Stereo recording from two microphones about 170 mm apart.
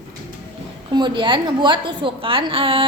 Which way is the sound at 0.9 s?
30° right (ahead or behind).